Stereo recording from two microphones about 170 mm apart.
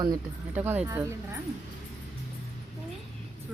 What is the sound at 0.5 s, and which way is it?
Speech, 10° right (ahead or behind).